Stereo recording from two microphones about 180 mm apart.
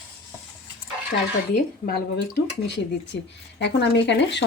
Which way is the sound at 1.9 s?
65° left (ahead or behind).